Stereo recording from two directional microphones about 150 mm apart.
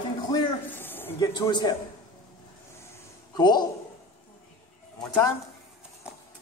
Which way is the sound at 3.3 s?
30° left (ahead or behind).